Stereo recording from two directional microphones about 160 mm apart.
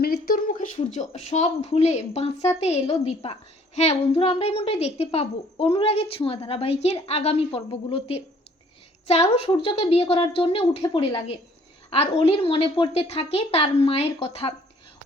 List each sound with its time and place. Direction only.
0.0 s a woman's voice: 70° left (ahead or behind); by 14.5 s 35° left (ahead or behind)